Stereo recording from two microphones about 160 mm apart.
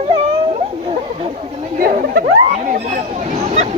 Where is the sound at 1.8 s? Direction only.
65° right (ahead or behind).